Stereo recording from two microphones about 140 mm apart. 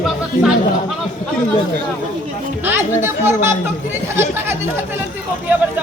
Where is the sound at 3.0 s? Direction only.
20° right (ahead or behind).